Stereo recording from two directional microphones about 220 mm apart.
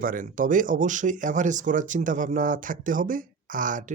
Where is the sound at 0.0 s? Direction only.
40° right (ahead or behind).